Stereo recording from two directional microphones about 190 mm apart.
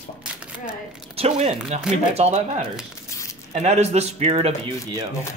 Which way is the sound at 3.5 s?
35° right (ahead or behind).